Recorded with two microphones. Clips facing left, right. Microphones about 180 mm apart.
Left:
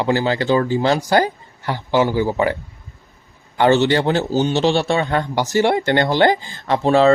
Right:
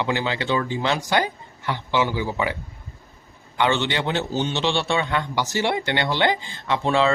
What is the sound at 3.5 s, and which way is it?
A man's voice, 40° left (ahead or behind).